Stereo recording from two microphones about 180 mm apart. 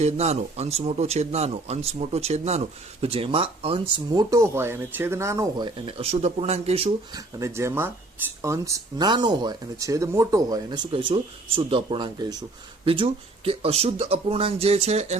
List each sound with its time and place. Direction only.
0.0 s speech: 35° right (ahead or behind)
7.3 s speech: 15° right (ahead or behind); by 15.2 s 35° right (ahead or behind)